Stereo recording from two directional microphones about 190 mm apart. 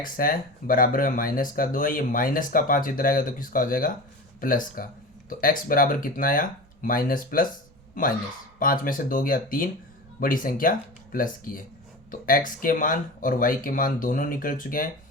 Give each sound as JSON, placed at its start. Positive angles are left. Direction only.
{"t": 0.0, "sound": "speech", "side_deg": 50}